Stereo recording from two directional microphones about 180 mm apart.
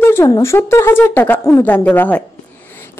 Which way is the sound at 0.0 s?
15° left (ahead or behind).